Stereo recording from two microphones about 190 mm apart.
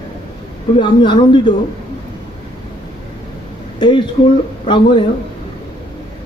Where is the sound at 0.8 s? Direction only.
25° left (ahead or behind).